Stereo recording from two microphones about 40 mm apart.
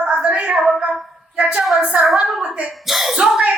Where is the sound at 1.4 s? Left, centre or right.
Right.